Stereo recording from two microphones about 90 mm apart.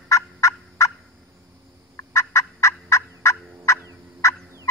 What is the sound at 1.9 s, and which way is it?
Fowl, 30° left (ahead or behind).